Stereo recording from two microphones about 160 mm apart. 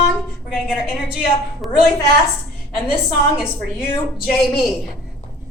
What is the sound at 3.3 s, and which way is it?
Speech, 5° right (ahead or behind).